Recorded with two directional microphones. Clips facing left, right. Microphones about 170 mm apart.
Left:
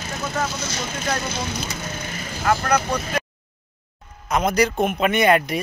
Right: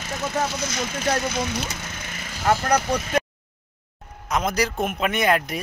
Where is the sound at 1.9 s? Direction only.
35° left (ahead or behind).